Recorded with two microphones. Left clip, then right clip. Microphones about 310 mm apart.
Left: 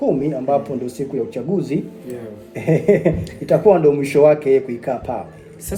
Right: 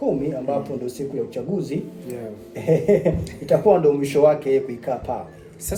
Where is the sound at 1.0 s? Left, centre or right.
Left.